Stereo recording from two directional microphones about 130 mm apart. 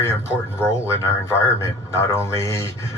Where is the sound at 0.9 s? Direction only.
20° left (ahead or behind).